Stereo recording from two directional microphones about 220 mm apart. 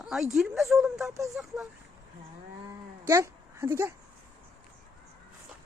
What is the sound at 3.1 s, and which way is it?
Speech, 15° right (ahead or behind).